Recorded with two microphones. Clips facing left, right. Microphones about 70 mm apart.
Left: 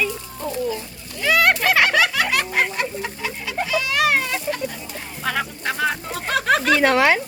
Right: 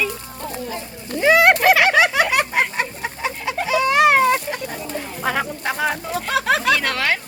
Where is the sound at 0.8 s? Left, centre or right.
Right.